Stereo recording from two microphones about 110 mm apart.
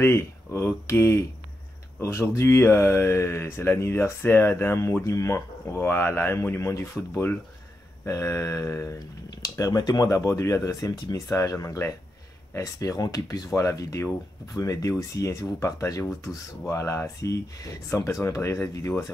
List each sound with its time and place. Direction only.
0.0 s speech: 25° left (ahead or behind)